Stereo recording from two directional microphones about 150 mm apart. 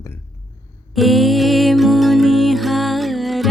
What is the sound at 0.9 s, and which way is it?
Music, centre (ahead or behind).